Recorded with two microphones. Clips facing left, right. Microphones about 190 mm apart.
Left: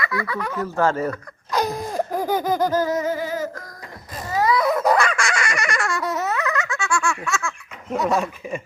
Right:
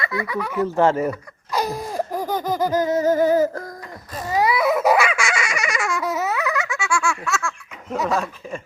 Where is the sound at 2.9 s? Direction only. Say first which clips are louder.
Right 7 dB; 40° right (ahead or behind).